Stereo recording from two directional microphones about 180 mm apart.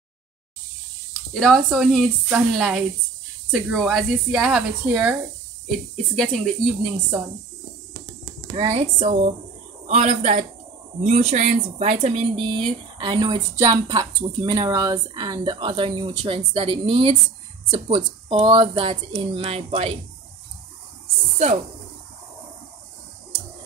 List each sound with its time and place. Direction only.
1.3 s speech: centre (ahead or behind)
5.7 s speech: 5° left (ahead or behind)
8.5 s speech: 35° right (ahead or behind)